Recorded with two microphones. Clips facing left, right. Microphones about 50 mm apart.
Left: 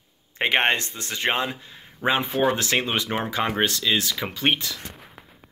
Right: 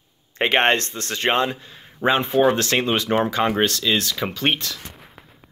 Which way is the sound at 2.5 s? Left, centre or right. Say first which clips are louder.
Right 3 dB; centre.